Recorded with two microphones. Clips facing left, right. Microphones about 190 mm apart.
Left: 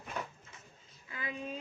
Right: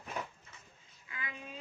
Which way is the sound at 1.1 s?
30° left (ahead or behind).